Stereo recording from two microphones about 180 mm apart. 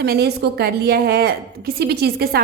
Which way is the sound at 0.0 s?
65° right (ahead or behind).